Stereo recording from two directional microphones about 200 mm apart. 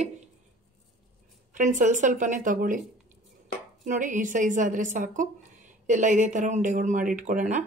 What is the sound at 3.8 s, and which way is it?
A woman's voice, 40° right (ahead or behind).